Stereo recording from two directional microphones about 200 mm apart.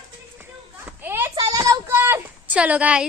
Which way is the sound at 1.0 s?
10° right (ahead or behind).